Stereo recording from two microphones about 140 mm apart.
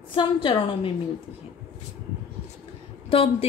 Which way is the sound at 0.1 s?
35° left (ahead or behind).